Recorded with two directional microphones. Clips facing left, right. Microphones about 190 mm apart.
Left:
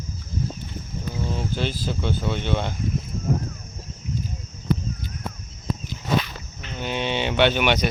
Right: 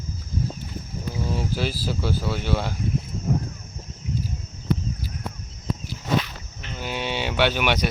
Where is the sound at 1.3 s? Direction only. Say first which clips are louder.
Right 1 dB; 5° right (ahead or behind).